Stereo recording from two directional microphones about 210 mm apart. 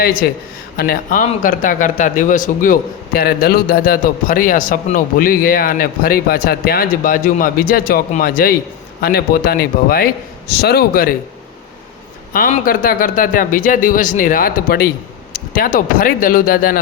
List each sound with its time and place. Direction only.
0.0 s a man's voice: 45° left (ahead or behind)
12.3 s a man's voice: 40° left (ahead or behind)